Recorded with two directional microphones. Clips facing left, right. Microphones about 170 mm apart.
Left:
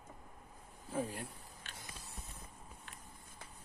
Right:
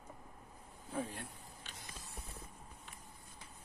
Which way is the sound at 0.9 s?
Centre (ahead or behind).